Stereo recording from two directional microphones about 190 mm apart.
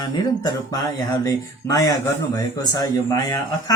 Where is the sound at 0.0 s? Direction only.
25° left (ahead or behind).